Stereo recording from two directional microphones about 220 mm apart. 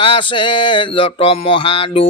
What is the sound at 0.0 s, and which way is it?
Mantra, 20° left (ahead or behind).